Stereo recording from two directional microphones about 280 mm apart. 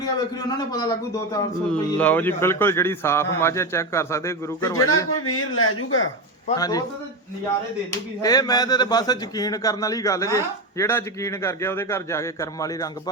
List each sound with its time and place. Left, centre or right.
0.0 s speech: centre
5.1 s speech: left
6.6 s speech: centre
7.9 s speech: centre